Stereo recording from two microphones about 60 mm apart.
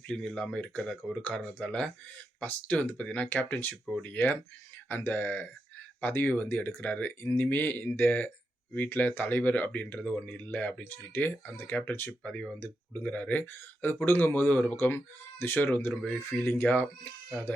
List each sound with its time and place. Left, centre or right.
0.1 s speech: centre; by 6.8 s left
6.8 s speech: left
12.2 s speech: centre
13.5 s speech: left